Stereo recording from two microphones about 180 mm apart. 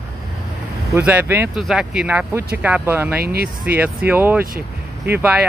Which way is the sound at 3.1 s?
60° right (ahead or behind).